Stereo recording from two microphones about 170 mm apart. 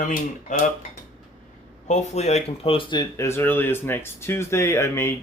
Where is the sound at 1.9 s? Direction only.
40° left (ahead or behind); by 5.1 s 15° left (ahead or behind).